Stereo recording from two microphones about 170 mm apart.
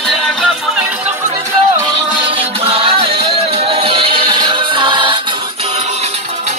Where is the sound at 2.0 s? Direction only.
30° right (ahead or behind).